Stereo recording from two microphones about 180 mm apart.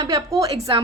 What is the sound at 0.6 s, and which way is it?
Speech, 30° right (ahead or behind).